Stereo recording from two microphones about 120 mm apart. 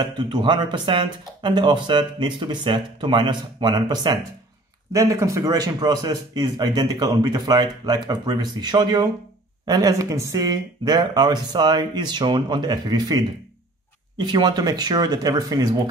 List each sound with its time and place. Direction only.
0.0 s speech: 40° right (ahead or behind)